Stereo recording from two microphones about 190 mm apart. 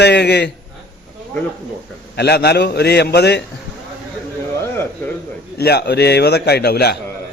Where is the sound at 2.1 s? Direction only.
60° left (ahead or behind).